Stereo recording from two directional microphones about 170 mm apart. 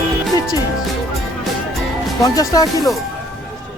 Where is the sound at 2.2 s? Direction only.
20° left (ahead or behind).